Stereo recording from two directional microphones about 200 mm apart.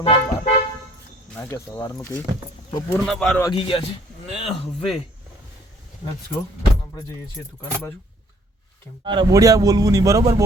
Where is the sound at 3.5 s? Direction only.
25° left (ahead or behind).